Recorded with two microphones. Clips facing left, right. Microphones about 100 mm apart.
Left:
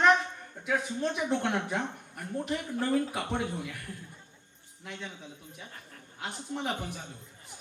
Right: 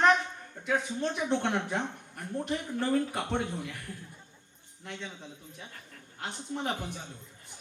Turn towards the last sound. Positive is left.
turn(degrees=0)  # may be behind; listen again after turning